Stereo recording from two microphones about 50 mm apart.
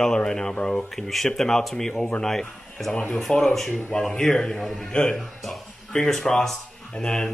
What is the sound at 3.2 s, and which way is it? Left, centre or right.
Speech, centre.